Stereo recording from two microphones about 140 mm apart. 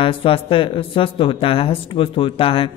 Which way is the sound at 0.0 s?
40° left (ahead or behind).